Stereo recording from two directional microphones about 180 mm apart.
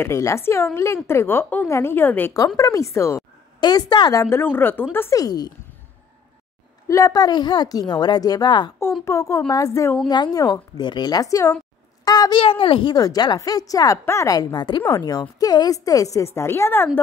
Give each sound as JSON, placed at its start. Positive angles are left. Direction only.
{"t": 0.0, "sound": "a woman's voice", "side_deg": 15}
{"t": 6.9, "sound": "a woman's voice", "side_deg": 20}